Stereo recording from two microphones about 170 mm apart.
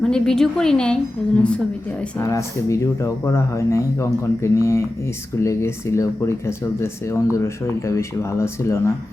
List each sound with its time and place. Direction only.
0.0 s a woman's voice: 5° left (ahead or behind)
2.1 s speech: 15° left (ahead or behind)